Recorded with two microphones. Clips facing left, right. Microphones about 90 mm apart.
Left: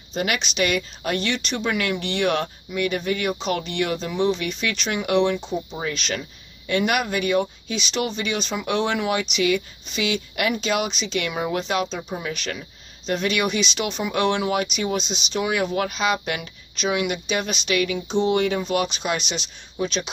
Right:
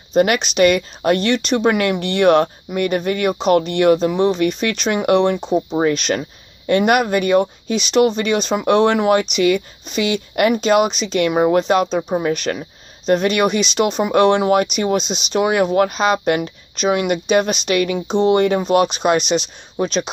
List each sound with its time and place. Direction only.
0.1 s speech: 50° right (ahead or behind)
3.9 s speech: 40° right (ahead or behind)